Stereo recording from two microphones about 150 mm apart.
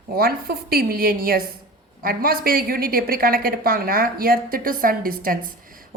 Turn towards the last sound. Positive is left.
turn(degrees=-75)  # may be behind; listen again after turning